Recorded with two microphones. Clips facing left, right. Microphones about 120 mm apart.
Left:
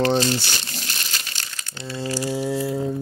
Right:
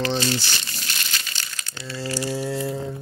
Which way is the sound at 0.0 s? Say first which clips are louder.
Left 4 dB; 45° left (ahead or behind).